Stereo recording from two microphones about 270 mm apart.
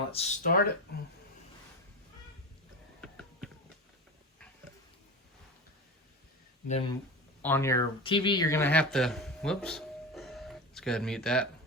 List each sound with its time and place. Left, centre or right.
0.1 s speech: left
3.0 s a sound: centre
6.7 s speech: left
7.4 s speech: centre